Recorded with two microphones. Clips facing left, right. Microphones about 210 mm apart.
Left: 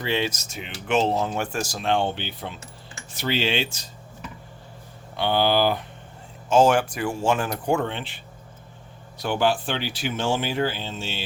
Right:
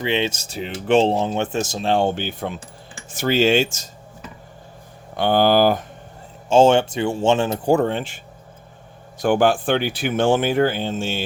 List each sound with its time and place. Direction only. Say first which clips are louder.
0.0 s speech: right 4 dB; 20° right (ahead or behind)
1.9 s speech: right 4 dB; 45° right (ahead or behind)
5.1 s speech: right 5 dB; 50° right (ahead or behind)
6.5 s speech: right 4 dB; 25° right (ahead or behind); by 11.2 s 50° right (ahead or behind)